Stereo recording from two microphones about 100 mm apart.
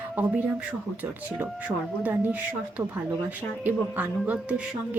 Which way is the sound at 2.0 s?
15° right (ahead or behind).